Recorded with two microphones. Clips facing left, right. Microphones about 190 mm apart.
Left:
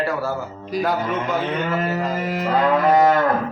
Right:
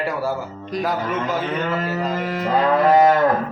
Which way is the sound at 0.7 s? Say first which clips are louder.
Left 1 dB; centre (ahead or behind).